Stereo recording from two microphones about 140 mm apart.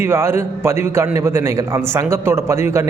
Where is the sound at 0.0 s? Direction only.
20° right (ahead or behind).